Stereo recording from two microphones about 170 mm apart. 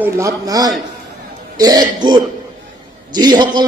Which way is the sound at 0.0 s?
20° right (ahead or behind).